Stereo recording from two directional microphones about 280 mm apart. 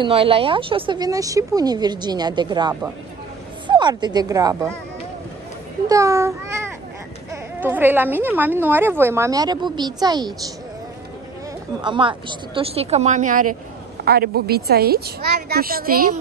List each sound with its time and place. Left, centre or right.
0.0 s speech: centre
5.9 s speech: centre
7.6 s speech: centre
11.8 s a woman's voice: centre